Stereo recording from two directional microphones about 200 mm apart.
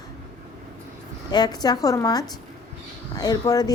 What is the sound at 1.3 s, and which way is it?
A woman's voice, 20° left (ahead or behind).